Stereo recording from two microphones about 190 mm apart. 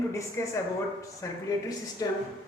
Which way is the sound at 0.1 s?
15° left (ahead or behind).